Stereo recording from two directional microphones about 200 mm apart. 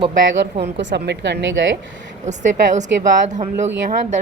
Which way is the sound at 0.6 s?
60° right (ahead or behind).